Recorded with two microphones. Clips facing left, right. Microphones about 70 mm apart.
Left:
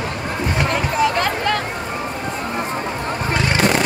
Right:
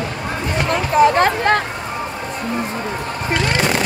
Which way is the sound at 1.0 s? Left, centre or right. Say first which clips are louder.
Right 7 dB; right.